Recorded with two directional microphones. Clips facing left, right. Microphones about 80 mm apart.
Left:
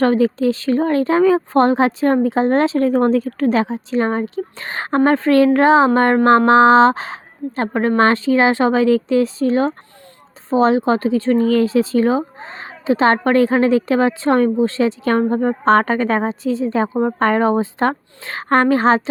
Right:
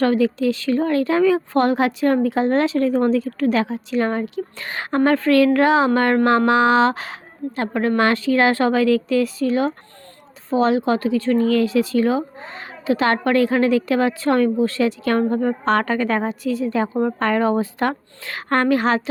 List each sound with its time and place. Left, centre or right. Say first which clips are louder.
0.0 s speech: left 3 dB; left